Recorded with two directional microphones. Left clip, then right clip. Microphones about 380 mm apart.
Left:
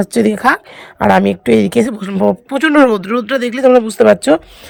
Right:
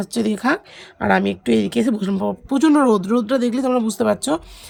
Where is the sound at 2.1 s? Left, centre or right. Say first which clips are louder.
Left 10 dB; left.